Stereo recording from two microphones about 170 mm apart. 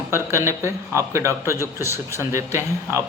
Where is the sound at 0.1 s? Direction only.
15° right (ahead or behind).